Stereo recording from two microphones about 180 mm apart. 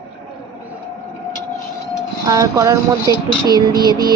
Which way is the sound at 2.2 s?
20° right (ahead or behind).